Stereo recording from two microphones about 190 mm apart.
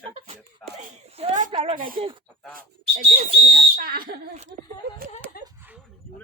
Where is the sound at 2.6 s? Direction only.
35° right (ahead or behind).